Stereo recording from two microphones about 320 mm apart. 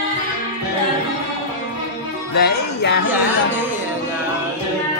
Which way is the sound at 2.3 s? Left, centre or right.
Left.